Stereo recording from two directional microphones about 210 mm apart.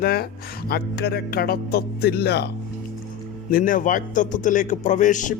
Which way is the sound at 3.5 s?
40° left (ahead or behind).